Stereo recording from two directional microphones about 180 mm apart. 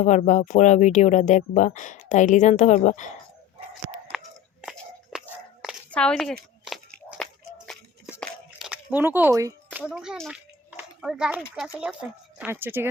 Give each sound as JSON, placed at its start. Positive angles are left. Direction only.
{"t": 0.0, "sound": "speech", "side_deg": 40}
{"t": 4.6, "sound": "biting", "side_deg": -5}
{"t": 5.9, "sound": "a sound", "side_deg": 5}
{"t": 11.9, "sound": "speech", "side_deg": -5}